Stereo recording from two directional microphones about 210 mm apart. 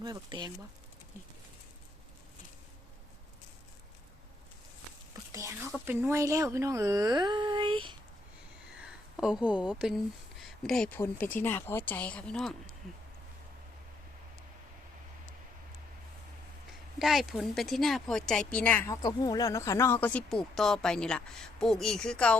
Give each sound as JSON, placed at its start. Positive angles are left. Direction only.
{"t": 0.0, "sound": "speech", "side_deg": -20}
{"t": 5.3, "sound": "speech", "side_deg": -15}
{"t": 8.8, "sound": "a woman's voice", "side_deg": -5}
{"t": 17.0, "sound": "speech", "side_deg": 0}